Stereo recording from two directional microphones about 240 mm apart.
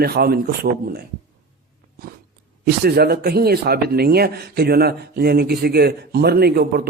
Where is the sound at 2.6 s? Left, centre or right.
Right.